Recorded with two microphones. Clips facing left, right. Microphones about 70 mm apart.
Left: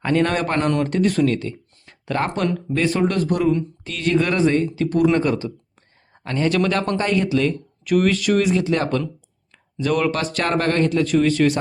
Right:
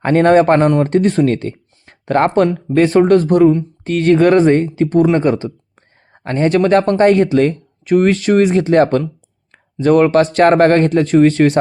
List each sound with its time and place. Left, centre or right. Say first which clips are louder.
0.0 s speech: right 10 dB; right
2.5 s speech: right 8 dB; right